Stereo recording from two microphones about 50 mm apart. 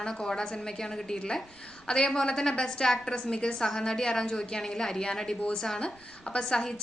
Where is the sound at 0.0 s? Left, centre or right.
Centre.